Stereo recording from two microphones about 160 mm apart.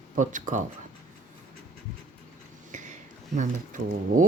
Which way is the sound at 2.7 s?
50° right (ahead or behind).